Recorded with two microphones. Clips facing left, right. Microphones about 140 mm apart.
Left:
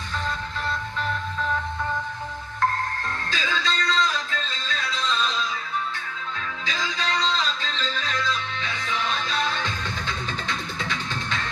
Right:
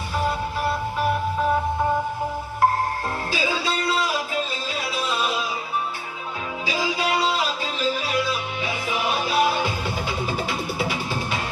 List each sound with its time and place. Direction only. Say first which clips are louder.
0.2 s music: right 7 dB; 10° right (ahead or behind)
1.5 s music: right 6 dB; 35° right (ahead or behind)
3.3 s music: right 2 dB; 10° right (ahead or behind)
6.7 s music: right 5 dB; 10° right (ahead or behind)